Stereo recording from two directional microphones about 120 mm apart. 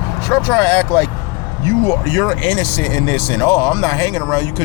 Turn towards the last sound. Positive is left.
turn(degrees=30)  # may be behind; listen again after turning